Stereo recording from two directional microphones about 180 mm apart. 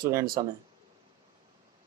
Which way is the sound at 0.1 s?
15° right (ahead or behind).